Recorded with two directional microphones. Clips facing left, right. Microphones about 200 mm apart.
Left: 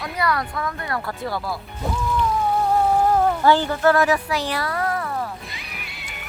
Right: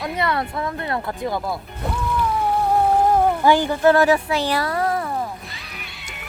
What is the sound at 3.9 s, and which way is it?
Speech, 30° right (ahead or behind).